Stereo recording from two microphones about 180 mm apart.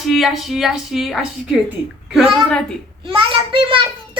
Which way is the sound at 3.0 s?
30° right (ahead or behind).